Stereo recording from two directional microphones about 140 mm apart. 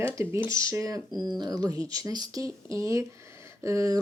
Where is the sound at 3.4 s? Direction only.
20° right (ahead or behind).